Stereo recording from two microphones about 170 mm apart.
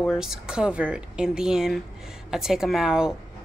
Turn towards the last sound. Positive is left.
turn(degrees=-5)  # may be behind; listen again after turning